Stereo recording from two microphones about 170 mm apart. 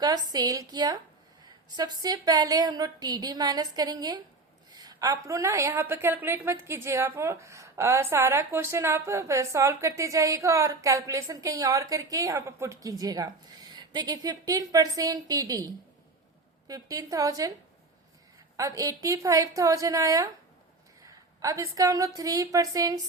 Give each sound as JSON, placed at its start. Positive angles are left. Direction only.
{"t": 0.0, "sound": "a woman's voice", "side_deg": -25}
{"t": 18.5, "sound": "a woman's voice", "side_deg": -20}
{"t": 21.4, "sound": "a woman's voice", "side_deg": -20}